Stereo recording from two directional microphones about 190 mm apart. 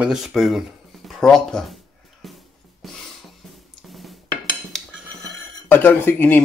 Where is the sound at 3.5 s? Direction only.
Centre (ahead or behind).